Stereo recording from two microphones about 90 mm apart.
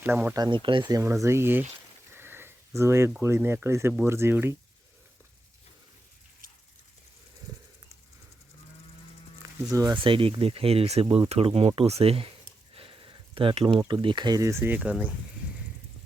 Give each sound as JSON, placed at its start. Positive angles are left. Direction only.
{"t": 0.0, "sound": "speech", "side_deg": -20}
{"t": 0.5, "sound": "speech", "side_deg": -65}
{"t": 0.9, "sound": "speech", "side_deg": -35}
{"t": 2.1, "sound": "sniff", "side_deg": -25}
{"t": 3.2, "sound": "speech", "side_deg": -25}
{"t": 9.4, "sound": "a sound", "side_deg": -40}
{"t": 10.0, "sound": "speech", "side_deg": -85}
{"t": 12.7, "sound": "a sound", "side_deg": -75}
{"t": 13.7, "sound": "speech", "side_deg": -65}
{"t": 14.4, "sound": "speech", "side_deg": -25}
{"t": 14.8, "sound": "speech", "side_deg": -15}